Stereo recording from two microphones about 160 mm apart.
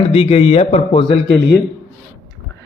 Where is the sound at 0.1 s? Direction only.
40° left (ahead or behind).